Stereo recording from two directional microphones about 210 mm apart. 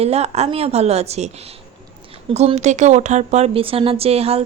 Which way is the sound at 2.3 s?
30° right (ahead or behind).